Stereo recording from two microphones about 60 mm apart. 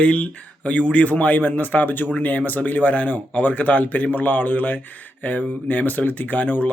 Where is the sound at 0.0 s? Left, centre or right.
Left.